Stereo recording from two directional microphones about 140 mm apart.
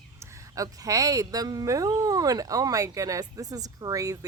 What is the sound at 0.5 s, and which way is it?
Speech, 25° right (ahead or behind).